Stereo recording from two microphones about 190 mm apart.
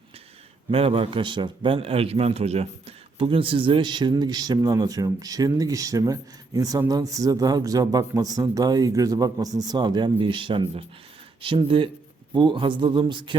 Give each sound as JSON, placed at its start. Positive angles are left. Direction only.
{"t": 0.7, "sound": "a man's voice", "side_deg": -30}